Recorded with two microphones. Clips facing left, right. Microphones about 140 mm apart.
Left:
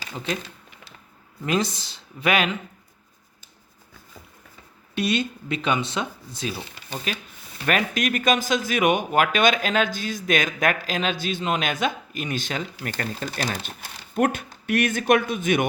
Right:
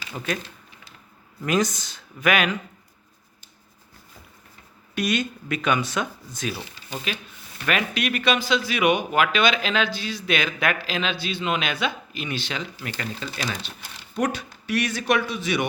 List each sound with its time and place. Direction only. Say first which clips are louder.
1.5 s speech: right 1 dB; 30° left (ahead or behind)
4.9 s speech: left 1 dB; 30° left (ahead or behind)
7.1 s speech: left 1 dB; 40° left (ahead or behind)